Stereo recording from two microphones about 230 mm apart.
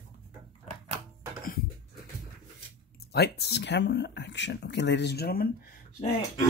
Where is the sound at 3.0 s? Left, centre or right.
Left.